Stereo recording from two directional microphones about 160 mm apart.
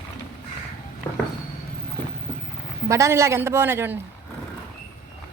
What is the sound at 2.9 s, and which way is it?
A woman's voice, 20° right (ahead or behind).